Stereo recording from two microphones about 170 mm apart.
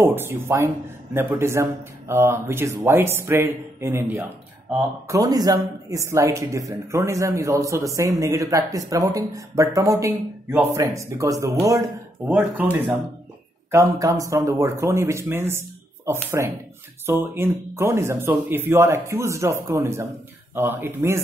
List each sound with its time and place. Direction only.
0.0 s speech: 15° right (ahead or behind)
12.3 s speech: 10° right (ahead or behind)
13.7 s speech: 20° right (ahead or behind)